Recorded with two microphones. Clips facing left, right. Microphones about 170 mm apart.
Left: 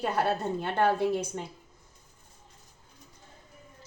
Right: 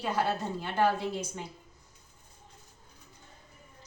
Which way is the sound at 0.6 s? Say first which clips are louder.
Left 2 dB; 60° left (ahead or behind).